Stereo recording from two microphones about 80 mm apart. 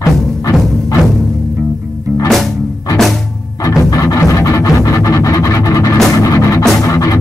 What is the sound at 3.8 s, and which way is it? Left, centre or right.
Music, left.